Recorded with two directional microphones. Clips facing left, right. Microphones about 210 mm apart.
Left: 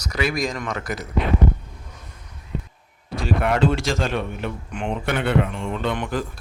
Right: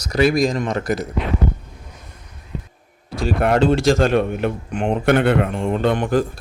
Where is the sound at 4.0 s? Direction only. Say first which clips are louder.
Right 8 dB; 50° right (ahead or behind).